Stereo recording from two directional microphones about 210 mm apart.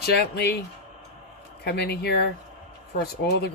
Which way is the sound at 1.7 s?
50° left (ahead or behind).